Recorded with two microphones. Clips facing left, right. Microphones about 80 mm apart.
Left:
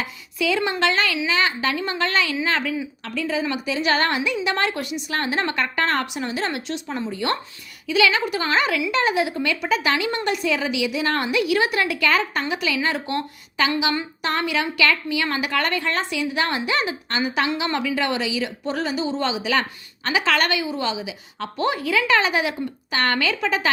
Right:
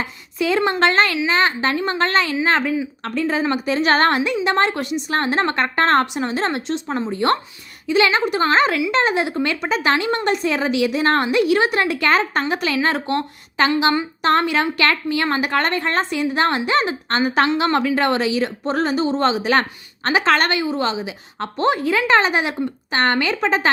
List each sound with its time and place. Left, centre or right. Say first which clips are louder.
0.0 s a woman's voice: right 2 dB; right
3.0 s a woman's voice: right 3 dB; right